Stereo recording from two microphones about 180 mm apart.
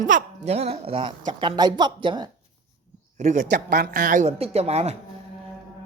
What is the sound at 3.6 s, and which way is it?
A woman's voice, 60° right (ahead or behind).